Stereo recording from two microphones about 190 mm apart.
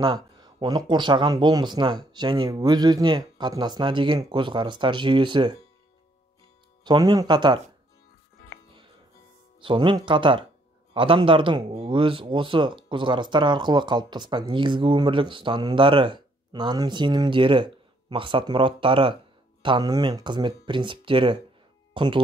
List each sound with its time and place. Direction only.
0.0 s speech: 20° right (ahead or behind)
6.8 s speech: 25° right (ahead or behind)
9.6 s speech: 25° right (ahead or behind)